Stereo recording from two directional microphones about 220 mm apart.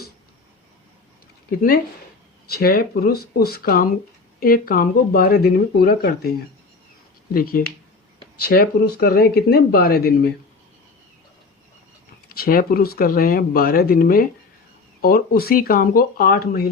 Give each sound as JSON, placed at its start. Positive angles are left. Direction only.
{"t": 1.5, "sound": "speech", "side_deg": 45}
{"t": 7.3, "sound": "speech", "side_deg": 40}
{"t": 12.3, "sound": "speech", "side_deg": 40}